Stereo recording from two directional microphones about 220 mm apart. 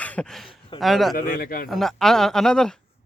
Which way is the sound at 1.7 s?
Centre (ahead or behind).